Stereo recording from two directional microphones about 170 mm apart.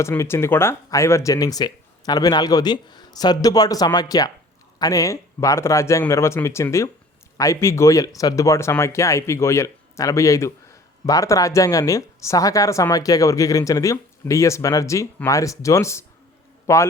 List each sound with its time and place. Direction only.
0.0 s speech: 15° left (ahead or behind)